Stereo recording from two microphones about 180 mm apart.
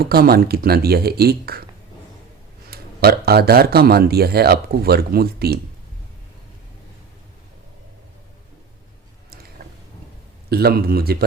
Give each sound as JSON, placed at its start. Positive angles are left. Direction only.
{"t": 0.0, "sound": "speech", "side_deg": -60}
{"t": 2.6, "sound": "speech", "side_deg": -60}
{"t": 10.5, "sound": "speech", "side_deg": -60}